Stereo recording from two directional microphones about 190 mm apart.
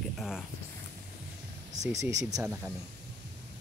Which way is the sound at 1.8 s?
10° right (ahead or behind).